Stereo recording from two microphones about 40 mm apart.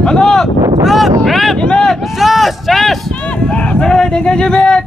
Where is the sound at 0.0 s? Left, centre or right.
Centre.